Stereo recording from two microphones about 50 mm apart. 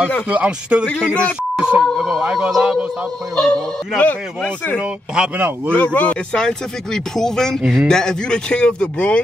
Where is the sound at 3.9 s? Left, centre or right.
Left.